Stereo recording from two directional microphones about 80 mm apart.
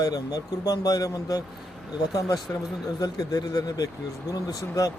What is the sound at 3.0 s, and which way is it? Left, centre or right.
Speech, left.